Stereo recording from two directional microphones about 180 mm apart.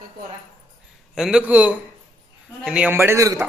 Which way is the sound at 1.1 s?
5° right (ahead or behind).